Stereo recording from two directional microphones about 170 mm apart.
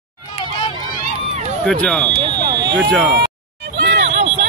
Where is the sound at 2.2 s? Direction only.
25° right (ahead or behind).